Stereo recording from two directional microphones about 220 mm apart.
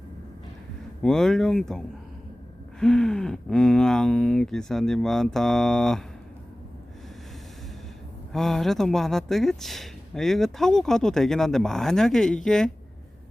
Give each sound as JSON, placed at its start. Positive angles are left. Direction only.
{"t": 1.0, "sound": "speech", "side_deg": 0}
{"t": 2.8, "sound": "speech", "side_deg": 5}
{"t": 8.3, "sound": "speech", "side_deg": 0}